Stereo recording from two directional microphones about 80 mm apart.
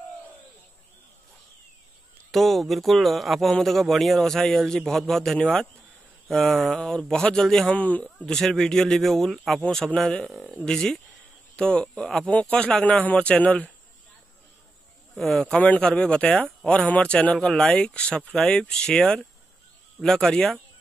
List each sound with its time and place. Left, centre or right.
2.3 s a man's voice: centre
7.7 s speech: centre
8.3 s a man's voice: centre
10.3 s a man's voice: centre
10.6 s speech: centre
15.1 s speech: centre